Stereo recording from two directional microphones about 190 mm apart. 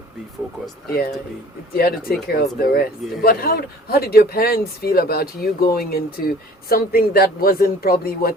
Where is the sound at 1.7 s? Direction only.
50° left (ahead or behind).